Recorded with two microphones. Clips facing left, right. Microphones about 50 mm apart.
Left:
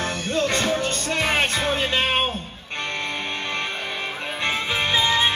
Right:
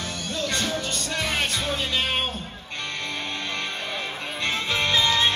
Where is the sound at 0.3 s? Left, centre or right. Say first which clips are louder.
Left 5 dB; left.